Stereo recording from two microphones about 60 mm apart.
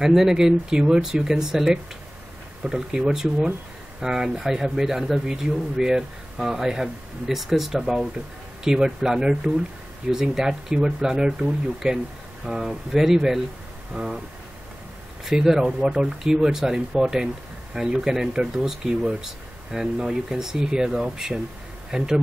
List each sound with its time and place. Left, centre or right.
0.0 s speech: centre
15.2 s speech: centre